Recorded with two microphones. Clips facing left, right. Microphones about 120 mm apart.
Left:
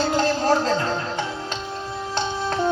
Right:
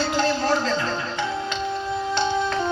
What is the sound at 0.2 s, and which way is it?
Music, 40° left (ahead or behind).